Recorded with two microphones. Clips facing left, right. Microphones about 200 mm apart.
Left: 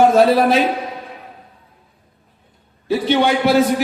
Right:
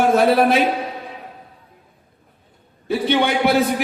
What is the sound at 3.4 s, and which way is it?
Speech, 55° right (ahead or behind).